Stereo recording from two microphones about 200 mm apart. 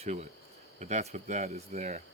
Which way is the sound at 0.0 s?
35° right (ahead or behind).